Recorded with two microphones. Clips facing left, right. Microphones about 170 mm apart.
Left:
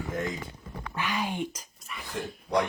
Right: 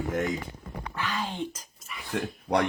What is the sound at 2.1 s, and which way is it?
Speech, 65° right (ahead or behind).